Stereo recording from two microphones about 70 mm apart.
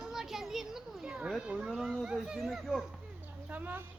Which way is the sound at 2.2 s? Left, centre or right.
Centre.